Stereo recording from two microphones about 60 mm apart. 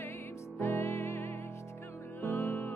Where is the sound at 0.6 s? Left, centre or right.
Left.